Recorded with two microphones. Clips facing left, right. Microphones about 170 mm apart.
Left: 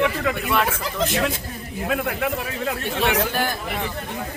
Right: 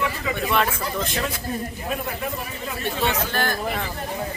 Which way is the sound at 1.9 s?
75° left (ahead or behind).